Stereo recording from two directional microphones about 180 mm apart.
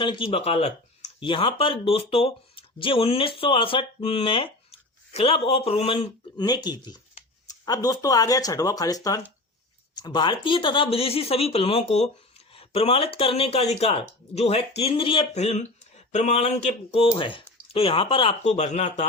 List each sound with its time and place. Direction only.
0.0 s speech: 30° left (ahead or behind)